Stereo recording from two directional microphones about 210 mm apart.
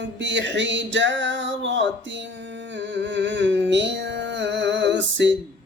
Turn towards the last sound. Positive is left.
turn(degrees=-60)  # may be behind; listen again after turning